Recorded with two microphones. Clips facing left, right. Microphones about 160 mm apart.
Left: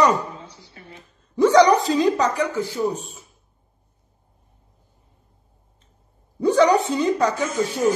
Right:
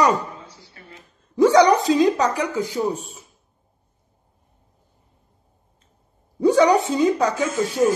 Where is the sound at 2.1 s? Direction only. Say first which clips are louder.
Even; 10° right (ahead or behind).